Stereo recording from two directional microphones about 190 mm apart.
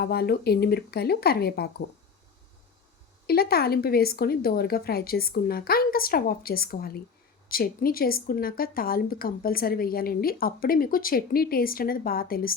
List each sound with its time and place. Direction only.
0.0 s speech: 55° left (ahead or behind)
3.2 s a woman's voice: 55° left (ahead or behind)